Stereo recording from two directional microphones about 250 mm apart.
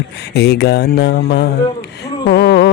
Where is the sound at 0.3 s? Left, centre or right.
Left.